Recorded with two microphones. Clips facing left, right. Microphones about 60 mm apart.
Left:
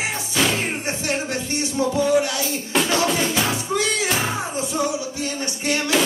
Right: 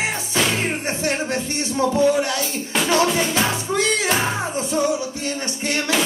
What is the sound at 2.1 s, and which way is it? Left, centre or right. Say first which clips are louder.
Speech: even; right.